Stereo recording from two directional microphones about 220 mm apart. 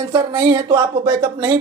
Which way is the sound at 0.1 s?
20° right (ahead or behind).